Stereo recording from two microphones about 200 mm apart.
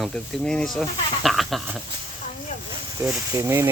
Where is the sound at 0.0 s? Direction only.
5° left (ahead or behind).